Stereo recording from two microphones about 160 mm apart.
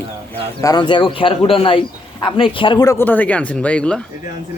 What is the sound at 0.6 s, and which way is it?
A man's voice, 25° left (ahead or behind).